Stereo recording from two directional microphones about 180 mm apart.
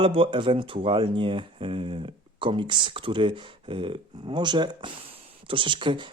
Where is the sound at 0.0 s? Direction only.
30° right (ahead or behind).